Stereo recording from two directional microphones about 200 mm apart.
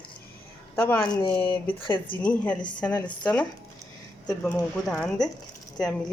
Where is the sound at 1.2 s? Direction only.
25° left (ahead or behind).